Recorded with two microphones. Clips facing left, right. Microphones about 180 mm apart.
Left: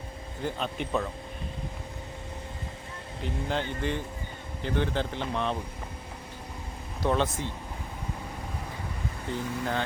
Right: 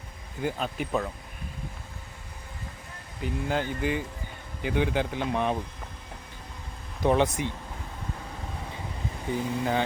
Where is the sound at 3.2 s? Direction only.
5° right (ahead or behind).